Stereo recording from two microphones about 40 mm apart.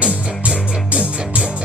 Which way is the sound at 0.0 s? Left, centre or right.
Right.